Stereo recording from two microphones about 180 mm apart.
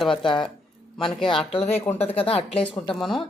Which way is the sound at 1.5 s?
35° left (ahead or behind).